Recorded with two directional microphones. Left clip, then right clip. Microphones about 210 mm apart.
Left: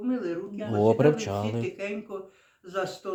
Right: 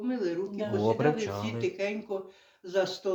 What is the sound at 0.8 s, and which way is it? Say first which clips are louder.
Speech: left 6 dB; 55° left (ahead or behind).